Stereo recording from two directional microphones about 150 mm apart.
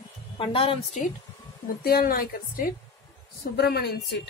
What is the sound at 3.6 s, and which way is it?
Speech, 90° left.